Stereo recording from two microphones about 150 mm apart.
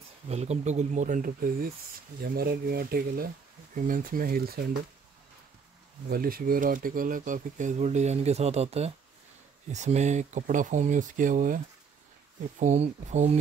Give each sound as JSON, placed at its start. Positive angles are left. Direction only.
{"t": 0.3, "sound": "speech", "side_deg": -45}
{"t": 2.2, "sound": "speech", "side_deg": -85}
{"t": 3.7, "sound": "speech", "side_deg": -65}
{"t": 6.0, "sound": "speech", "side_deg": -75}
{"t": 12.5, "sound": "speech", "side_deg": -50}